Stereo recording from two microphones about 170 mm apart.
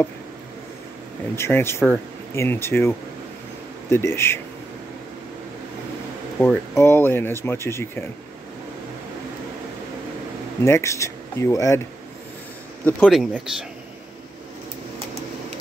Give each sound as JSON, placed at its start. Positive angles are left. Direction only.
{"t": 1.3, "sound": "speech", "side_deg": 15}
{"t": 3.9, "sound": "speech", "side_deg": 15}
{"t": 6.4, "sound": "speech", "side_deg": 15}
{"t": 10.6, "sound": "speech", "side_deg": 15}
{"t": 13.0, "sound": "speech", "side_deg": 0}